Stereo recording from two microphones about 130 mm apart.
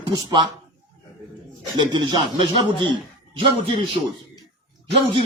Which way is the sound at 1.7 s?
35° right (ahead or behind).